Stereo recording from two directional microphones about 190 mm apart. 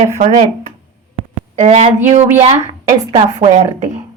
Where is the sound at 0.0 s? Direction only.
35° right (ahead or behind).